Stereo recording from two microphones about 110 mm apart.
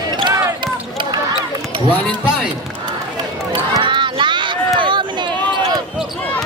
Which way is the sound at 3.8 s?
45° right (ahead or behind).